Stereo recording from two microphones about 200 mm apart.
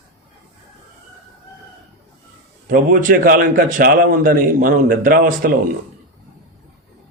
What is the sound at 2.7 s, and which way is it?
Speech, 45° right (ahead or behind).